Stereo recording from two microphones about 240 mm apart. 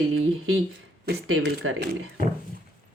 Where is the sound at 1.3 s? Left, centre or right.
Right.